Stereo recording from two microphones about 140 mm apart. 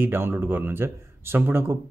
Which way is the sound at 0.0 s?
15° right (ahead or behind).